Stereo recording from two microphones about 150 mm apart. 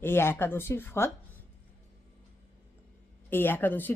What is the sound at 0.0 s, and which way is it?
Speech, 15° left (ahead or behind).